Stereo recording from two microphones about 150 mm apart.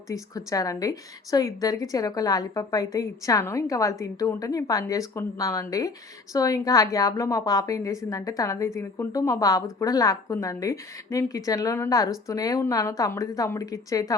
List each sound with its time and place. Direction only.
0.1 s a woman's voice: 25° left (ahead or behind)